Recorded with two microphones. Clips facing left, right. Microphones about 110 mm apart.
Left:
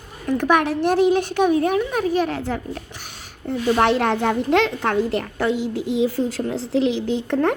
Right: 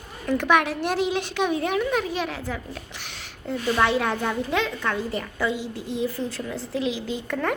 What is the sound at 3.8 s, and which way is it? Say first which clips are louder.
A woman's voice: left 4 dB; 70° left (ahead or behind).